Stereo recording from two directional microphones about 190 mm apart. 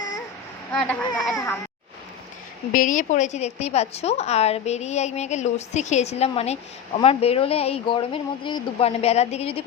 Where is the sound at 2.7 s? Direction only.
45° left (ahead or behind).